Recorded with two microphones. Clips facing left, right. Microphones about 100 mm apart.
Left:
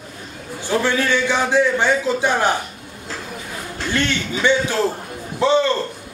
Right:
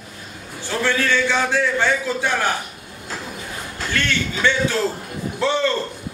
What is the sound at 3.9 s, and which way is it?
A man's voice, 20° left (ahead or behind).